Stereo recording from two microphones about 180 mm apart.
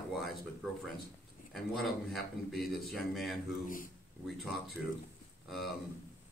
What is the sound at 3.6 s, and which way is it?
Speech, 50° left (ahead or behind).